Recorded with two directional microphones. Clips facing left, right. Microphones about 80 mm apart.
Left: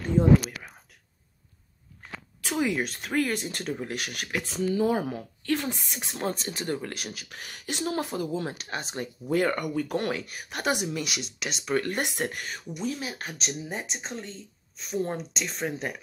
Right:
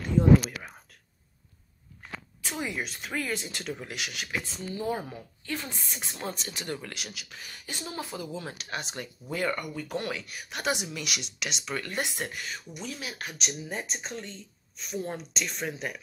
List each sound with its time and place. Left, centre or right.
2.4 s speech: left
6.1 s speech: left
7.2 s speech: left
8.5 s speech: left
12.8 s speech: left
13.7 s speech: left